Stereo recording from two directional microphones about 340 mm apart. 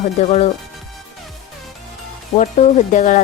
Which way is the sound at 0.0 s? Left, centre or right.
Centre.